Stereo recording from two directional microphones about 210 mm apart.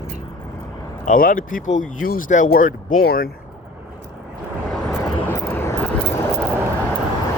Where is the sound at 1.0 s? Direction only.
40° left (ahead or behind).